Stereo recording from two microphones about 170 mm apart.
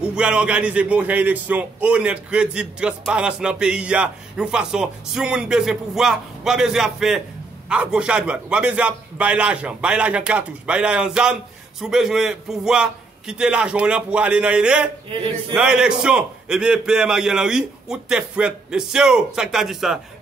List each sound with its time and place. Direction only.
0.0 s a man's voice: 5° right (ahead or behind)